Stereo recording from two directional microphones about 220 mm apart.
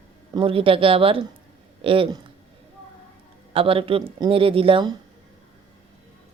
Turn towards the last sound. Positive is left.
turn(degrees=-25)  # may be behind; listen again after turning